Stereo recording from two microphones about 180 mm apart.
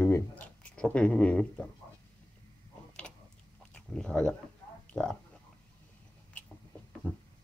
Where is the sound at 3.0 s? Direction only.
5° left (ahead or behind).